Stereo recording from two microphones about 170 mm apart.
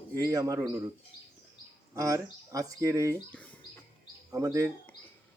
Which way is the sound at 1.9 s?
20° right (ahead or behind).